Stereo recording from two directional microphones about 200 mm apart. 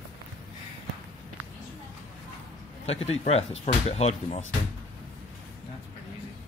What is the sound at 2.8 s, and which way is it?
Speech, 30° left (ahead or behind).